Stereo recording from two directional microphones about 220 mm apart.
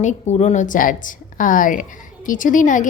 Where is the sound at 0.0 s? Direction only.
30° left (ahead or behind).